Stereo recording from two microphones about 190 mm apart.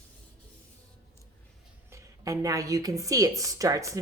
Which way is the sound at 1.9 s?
15° right (ahead or behind).